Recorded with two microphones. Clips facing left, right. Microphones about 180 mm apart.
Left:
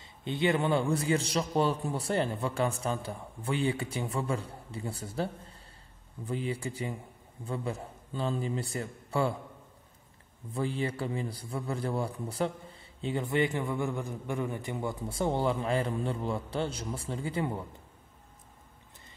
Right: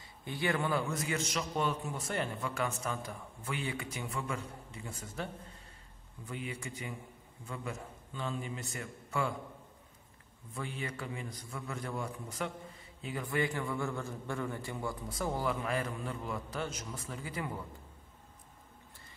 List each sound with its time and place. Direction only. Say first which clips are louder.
0.0 s a man's voice: left 6 dB; 25° left (ahead or behind)
10.5 s a man's voice: left 8 dB; 30° left (ahead or behind)